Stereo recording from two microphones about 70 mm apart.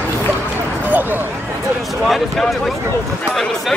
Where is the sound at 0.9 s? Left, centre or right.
Right.